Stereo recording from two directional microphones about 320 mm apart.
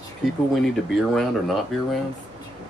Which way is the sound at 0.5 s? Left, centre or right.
Centre.